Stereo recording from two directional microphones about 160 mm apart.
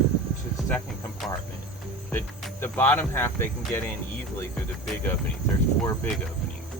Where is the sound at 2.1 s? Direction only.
15° left (ahead or behind).